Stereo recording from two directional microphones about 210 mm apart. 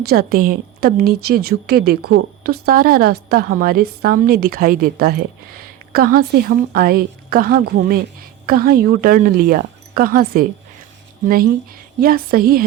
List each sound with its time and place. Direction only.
0.0 s speech: 50° right (ahead or behind)
11.9 s speech: 45° right (ahead or behind)